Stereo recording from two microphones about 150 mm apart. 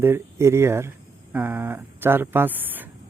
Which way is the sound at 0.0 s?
15° right (ahead or behind).